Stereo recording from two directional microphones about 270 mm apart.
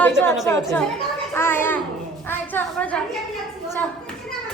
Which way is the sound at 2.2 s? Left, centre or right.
Centre.